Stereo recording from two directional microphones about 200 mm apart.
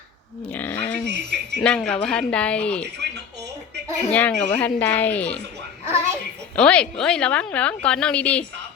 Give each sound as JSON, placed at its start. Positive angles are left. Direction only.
{"t": 0.5, "sound": "a sound", "side_deg": 5}
{"t": 1.0, "sound": "music", "side_deg": -55}
{"t": 1.5, "sound": "speech", "side_deg": 5}
{"t": 4.1, "sound": "speech", "side_deg": 5}
{"t": 6.6, "sound": "speech", "side_deg": 5}